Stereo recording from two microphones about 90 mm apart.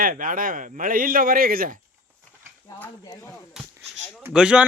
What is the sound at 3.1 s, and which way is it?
Speech, 35° left (ahead or behind).